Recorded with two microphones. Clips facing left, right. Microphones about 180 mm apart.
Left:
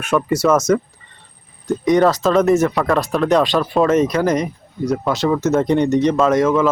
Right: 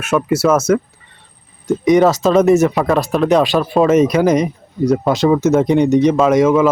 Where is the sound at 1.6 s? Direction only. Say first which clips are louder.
Right 3 dB; 5° right (ahead or behind).